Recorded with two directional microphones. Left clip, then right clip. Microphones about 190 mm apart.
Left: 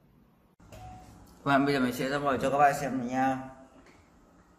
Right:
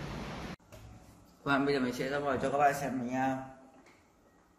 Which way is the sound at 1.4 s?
25° left (ahead or behind).